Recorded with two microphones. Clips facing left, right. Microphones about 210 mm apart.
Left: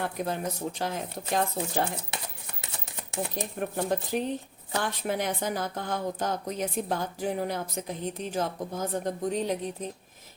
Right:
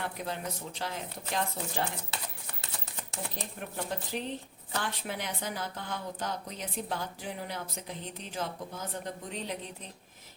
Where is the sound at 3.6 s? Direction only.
50° left (ahead or behind).